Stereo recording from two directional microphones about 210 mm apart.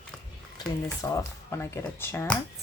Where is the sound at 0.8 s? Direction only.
15° left (ahead or behind).